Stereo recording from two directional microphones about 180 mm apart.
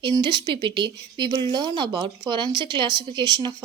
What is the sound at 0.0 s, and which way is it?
Speech, 25° right (ahead or behind).